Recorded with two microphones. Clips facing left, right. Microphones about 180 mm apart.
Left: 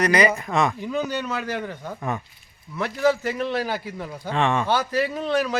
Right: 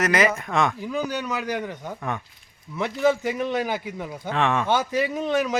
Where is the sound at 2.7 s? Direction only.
20° right (ahead or behind).